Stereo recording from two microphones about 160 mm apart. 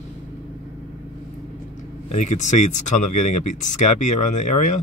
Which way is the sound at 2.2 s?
50° left (ahead or behind).